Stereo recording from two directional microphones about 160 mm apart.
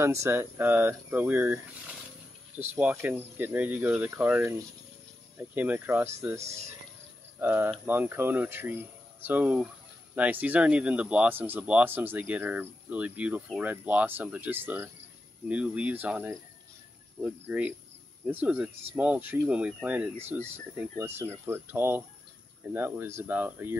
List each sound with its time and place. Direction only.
0.0 s speech: 15° right (ahead or behind)
2.7 s speech: 10° right (ahead or behind)